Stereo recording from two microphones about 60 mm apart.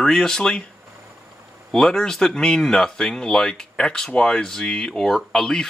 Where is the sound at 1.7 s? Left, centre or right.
Centre.